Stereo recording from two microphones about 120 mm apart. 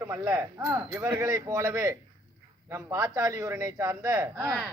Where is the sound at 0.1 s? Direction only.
25° right (ahead or behind).